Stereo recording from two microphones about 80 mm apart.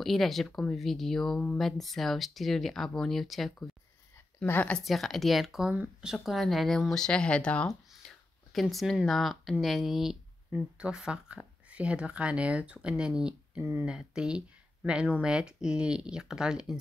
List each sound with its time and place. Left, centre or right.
0.0 s speech: centre
4.5 s speech: left
4.8 s speech: centre
5.8 s speech: centre
6.1 s speech: centre
8.0 s whispering: centre
8.5 s speech: centre
13.6 s speech: right
13.8 s speech: centre